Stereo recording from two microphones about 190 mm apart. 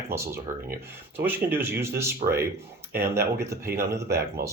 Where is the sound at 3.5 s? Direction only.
15° right (ahead or behind).